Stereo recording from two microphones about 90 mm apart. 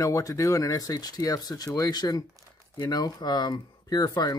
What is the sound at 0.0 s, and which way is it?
Speech, 35° left (ahead or behind).